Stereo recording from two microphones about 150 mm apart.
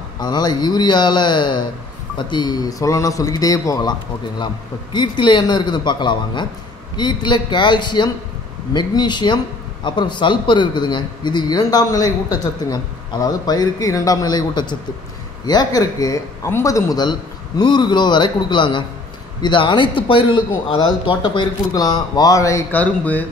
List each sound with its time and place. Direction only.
0.2 s speech: 25° left (ahead or behind)
4.9 s a man's voice: 30° left (ahead or behind); by 23.2 s 10° left (ahead or behind)